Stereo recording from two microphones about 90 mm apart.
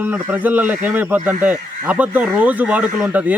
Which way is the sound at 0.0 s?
20° right (ahead or behind).